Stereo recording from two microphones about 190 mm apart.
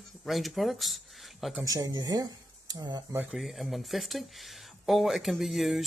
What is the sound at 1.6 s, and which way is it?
Speech, 20° right (ahead or behind).